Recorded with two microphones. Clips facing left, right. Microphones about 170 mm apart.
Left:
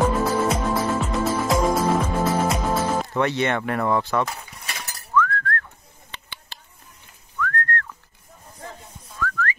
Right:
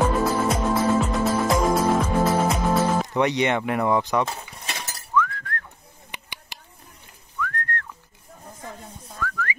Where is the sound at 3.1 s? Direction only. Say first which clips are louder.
Right 1 dB; 15° right (ahead or behind).